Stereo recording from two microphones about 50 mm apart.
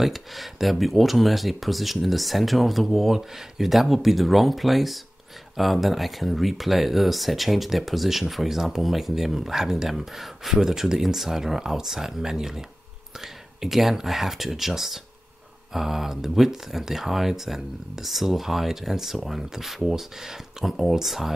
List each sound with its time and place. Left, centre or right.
0.0 s speech: centre